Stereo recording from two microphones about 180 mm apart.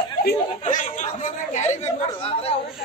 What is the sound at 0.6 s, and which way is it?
Chatter, 40° left (ahead or behind).